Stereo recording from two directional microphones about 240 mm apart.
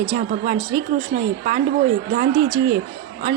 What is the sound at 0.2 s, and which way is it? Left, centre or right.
Speech, right.